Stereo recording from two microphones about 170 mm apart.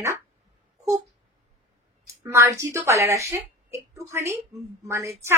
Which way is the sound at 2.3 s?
15° right (ahead or behind).